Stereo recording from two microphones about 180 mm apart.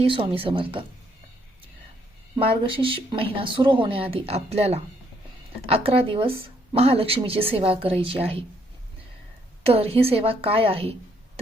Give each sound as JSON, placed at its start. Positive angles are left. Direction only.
{"t": 0.0, "sound": "speech", "side_deg": -30}
{"t": 2.3, "sound": "a woman's voice", "side_deg": -30}
{"t": 9.6, "sound": "a woman's voice", "side_deg": -35}